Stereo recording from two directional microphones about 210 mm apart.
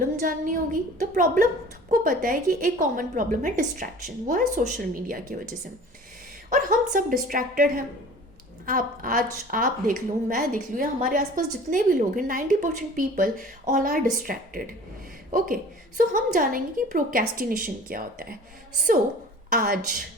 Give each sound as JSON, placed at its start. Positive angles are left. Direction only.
{"t": 0.0, "sound": "speech", "side_deg": -40}
{"t": 6.5, "sound": "speech", "side_deg": -40}
{"t": 19.5, "sound": "a woman's voice", "side_deg": -45}